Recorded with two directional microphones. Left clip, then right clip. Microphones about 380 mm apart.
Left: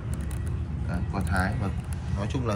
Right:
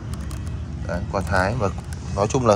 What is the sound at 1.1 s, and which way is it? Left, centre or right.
Speech, centre.